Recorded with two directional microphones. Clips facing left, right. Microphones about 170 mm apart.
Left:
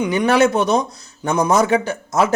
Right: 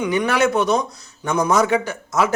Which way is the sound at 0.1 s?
25° left (ahead or behind).